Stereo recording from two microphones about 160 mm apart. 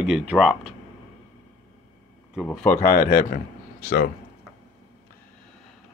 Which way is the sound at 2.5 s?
5° left (ahead or behind).